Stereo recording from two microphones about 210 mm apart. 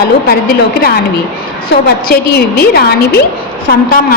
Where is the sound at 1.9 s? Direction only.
45° left (ahead or behind).